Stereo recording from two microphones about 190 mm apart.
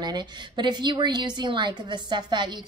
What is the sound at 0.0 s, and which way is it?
A woman's voice, 20° right (ahead or behind).